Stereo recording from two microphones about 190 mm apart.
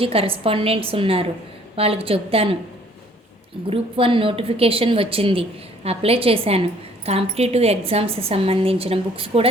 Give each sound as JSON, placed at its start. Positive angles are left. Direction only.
{"t": 0.0, "sound": "a woman's voice", "side_deg": -30}
{"t": 3.7, "sound": "speech", "side_deg": -30}